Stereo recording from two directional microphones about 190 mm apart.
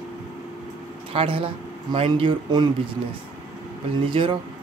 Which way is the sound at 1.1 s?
30° right (ahead or behind).